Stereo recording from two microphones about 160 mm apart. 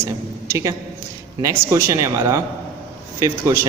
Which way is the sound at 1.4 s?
20° right (ahead or behind).